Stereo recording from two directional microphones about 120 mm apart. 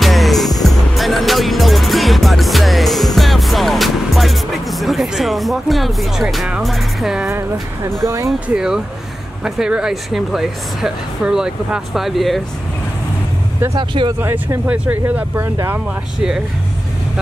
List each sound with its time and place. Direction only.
0.0 s music: centre (ahead or behind)
8.0 s speech: 25° right (ahead or behind)
8.3 s speech: 5° right (ahead or behind)
13.7 s speech: 40° right (ahead or behind)
14.2 s speech: 20° right (ahead or behind)